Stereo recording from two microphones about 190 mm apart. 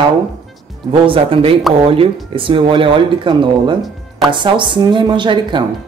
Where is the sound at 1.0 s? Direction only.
30° right (ahead or behind).